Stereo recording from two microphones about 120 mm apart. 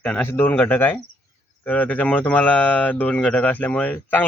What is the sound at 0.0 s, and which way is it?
A man's voice, 10° left (ahead or behind).